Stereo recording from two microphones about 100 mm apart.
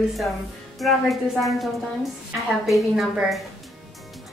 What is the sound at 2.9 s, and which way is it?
Speech, centre (ahead or behind).